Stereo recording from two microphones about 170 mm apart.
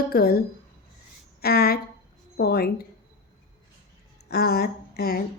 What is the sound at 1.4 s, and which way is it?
A woman's voice, 65° left (ahead or behind).